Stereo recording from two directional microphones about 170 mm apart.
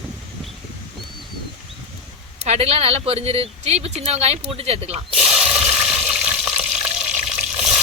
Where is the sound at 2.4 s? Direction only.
40° right (ahead or behind).